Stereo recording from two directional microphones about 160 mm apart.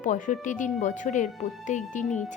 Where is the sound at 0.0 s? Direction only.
50° left (ahead or behind).